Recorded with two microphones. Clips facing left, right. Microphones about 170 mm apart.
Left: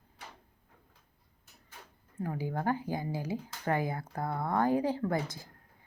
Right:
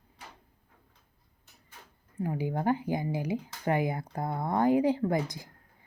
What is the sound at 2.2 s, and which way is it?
A woman's voice, 15° right (ahead or behind).